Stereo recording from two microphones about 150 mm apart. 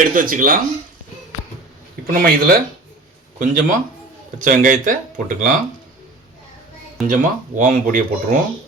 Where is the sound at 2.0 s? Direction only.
70° right (ahead or behind).